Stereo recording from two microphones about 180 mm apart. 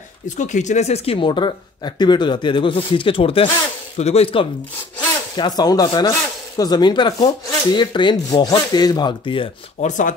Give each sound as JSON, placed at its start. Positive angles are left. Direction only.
{"t": 0.4, "sound": "speech", "side_deg": 40}
{"t": 9.8, "sound": "speech", "side_deg": 45}